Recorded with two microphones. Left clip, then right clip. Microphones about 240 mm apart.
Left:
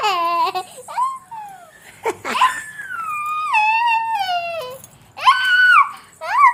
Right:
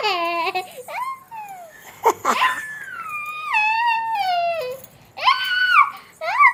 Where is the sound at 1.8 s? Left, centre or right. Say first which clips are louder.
Right 5 dB; centre.